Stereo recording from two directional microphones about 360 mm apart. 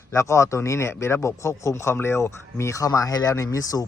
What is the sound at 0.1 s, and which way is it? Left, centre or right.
Speech, centre.